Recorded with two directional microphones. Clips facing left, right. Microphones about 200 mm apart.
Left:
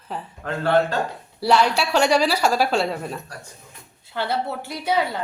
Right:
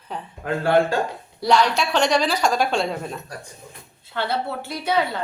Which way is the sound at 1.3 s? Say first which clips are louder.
Even; 5° left (ahead or behind).